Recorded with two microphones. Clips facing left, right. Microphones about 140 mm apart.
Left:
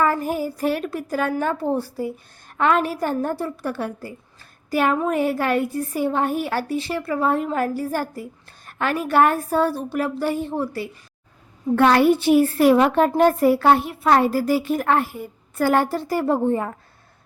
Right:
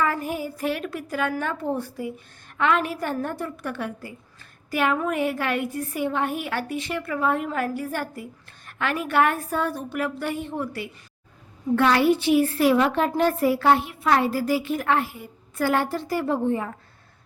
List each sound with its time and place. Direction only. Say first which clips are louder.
0.0 s a woman's voice: left 4 dB; 40° left (ahead or behind)
11.8 s a woman's voice: left 4 dB; 50° left (ahead or behind)